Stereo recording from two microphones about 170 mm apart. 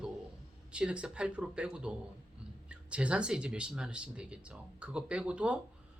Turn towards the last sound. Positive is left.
turn(degrees=-5)  # may be behind; listen again after turning